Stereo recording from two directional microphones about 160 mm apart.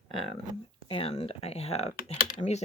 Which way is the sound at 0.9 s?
35° left (ahead or behind).